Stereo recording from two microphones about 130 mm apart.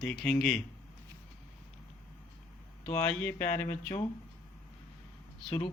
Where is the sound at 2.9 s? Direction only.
15° left (ahead or behind).